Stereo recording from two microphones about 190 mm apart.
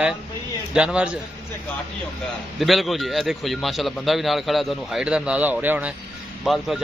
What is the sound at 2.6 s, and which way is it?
A man's voice, centre (ahead or behind).